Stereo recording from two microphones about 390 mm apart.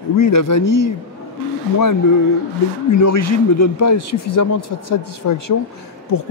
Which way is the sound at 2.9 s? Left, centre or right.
Left.